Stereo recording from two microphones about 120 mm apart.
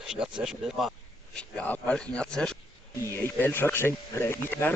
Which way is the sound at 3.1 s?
20° left (ahead or behind).